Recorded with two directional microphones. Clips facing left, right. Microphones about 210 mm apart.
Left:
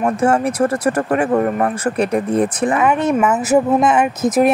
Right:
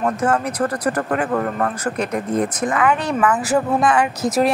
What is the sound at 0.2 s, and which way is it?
Speech, 30° left (ahead or behind).